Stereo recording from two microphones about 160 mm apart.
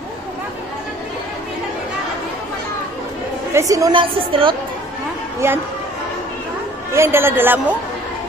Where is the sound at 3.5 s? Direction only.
20° right (ahead or behind).